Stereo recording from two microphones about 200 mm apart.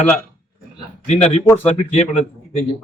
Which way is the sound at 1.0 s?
30° left (ahead or behind).